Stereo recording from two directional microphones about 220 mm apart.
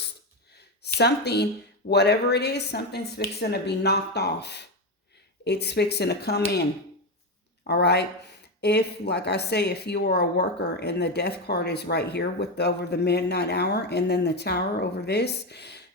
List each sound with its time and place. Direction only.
0.5 s a sound: 50° left (ahead or behind)
1.9 s a woman's voice: 50° left (ahead or behind)
7.7 s a woman's voice: 50° left (ahead or behind)